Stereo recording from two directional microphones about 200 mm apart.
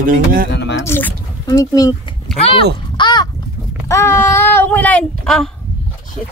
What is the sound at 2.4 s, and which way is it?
Speech, 25° left (ahead or behind).